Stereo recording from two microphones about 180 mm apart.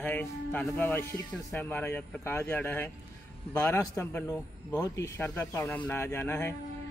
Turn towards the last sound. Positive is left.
turn(degrees=15)  # may be behind; listen again after turning